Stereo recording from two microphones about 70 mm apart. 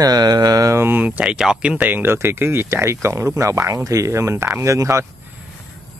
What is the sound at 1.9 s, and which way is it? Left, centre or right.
Speech, right.